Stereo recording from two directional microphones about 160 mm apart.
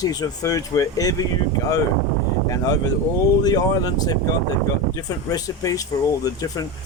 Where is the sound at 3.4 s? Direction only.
25° left (ahead or behind).